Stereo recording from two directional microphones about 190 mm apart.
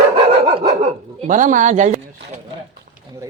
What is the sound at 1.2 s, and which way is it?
Speech, 40° right (ahead or behind).